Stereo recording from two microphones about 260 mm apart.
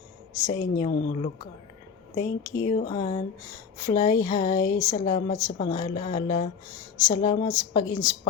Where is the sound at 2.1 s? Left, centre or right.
Centre.